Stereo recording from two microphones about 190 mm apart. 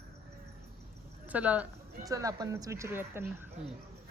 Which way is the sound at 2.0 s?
20° right (ahead or behind).